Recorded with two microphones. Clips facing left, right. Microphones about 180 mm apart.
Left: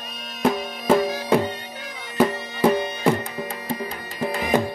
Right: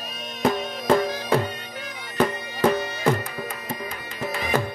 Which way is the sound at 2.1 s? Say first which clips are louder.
Left 3 dB; 10° left (ahead or behind).